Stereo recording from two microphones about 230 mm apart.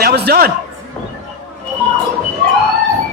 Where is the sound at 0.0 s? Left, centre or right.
Right.